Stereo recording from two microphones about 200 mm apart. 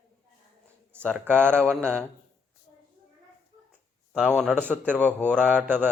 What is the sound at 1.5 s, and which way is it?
Speech, 5° left (ahead or behind).